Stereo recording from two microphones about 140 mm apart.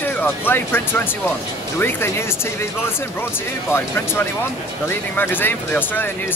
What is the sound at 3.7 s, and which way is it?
Speech, 15° left (ahead or behind).